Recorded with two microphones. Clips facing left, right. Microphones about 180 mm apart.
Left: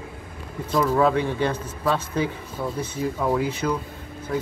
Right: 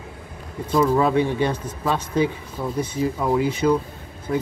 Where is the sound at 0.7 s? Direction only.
15° right (ahead or behind).